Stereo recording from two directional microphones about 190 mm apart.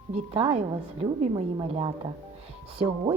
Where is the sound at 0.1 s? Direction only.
30° right (ahead or behind).